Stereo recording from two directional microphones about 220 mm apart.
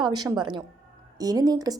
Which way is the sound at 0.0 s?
20° right (ahead or behind).